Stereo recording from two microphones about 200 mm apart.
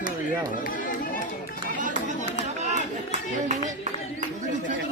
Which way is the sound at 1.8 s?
40° right (ahead or behind).